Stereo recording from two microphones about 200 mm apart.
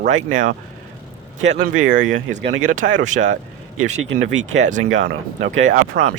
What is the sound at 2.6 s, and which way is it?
Speech, 40° right (ahead or behind).